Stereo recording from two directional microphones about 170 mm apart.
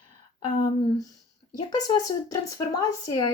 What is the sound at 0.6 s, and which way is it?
Speech, 20° left (ahead or behind).